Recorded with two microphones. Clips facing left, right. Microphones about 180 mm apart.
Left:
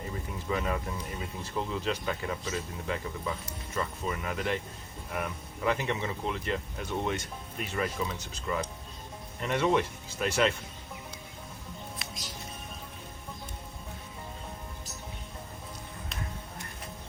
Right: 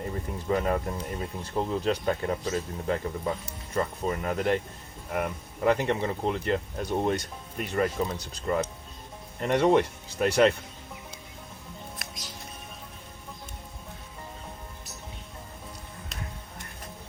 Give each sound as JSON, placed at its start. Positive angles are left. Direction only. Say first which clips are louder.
{"t": 0.1, "sound": "speech", "louder": "right 5 dB", "side_deg": -40}